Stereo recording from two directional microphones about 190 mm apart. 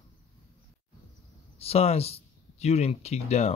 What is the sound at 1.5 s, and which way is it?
Speech, 30° left (ahead or behind).